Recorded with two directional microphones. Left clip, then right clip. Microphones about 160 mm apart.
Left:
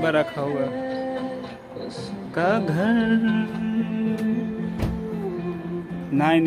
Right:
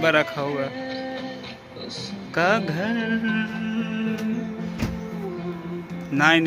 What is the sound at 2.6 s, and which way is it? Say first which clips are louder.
Music: left 3 dB; 30° left (ahead or behind).